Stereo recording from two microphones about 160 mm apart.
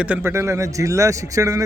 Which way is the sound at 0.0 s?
10° right (ahead or behind).